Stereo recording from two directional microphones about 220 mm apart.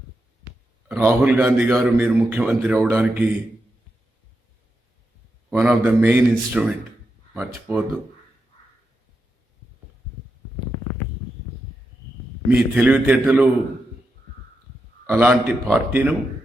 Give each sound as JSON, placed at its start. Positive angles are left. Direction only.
{"t": 0.9, "sound": "a man's voice", "side_deg": -5}
{"t": 5.5, "sound": "a man's voice", "side_deg": -5}
{"t": 12.5, "sound": "a man's voice", "side_deg": -5}
{"t": 15.0, "sound": "a man's voice", "side_deg": -10}